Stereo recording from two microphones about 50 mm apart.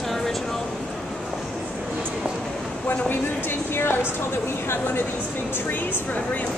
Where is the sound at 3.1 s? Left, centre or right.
Left.